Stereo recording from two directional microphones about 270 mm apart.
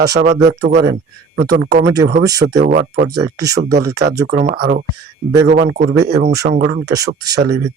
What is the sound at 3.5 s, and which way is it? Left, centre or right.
Speech, right.